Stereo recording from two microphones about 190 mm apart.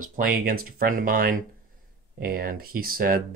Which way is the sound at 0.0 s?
45° right (ahead or behind).